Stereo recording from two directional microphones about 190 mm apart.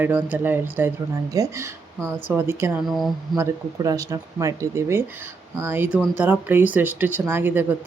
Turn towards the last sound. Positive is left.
turn(degrees=-10)  # may be behind; listen again after turning